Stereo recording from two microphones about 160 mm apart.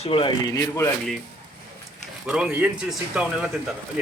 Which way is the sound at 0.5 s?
15° left (ahead or behind).